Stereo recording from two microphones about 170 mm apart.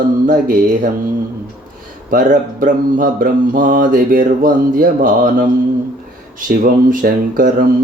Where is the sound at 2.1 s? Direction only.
50° right (ahead or behind).